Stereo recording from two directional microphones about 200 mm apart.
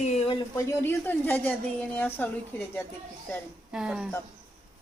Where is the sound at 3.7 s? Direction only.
5° right (ahead or behind).